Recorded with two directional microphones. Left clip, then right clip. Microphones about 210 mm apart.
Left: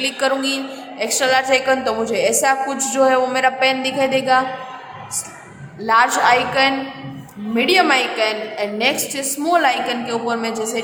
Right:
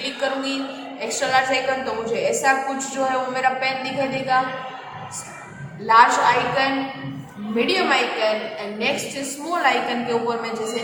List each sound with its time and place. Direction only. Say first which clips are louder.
0.0 s a woman's voice: left 5 dB; 55° left (ahead or behind)
5.8 s a woman's voice: even; 50° left (ahead or behind)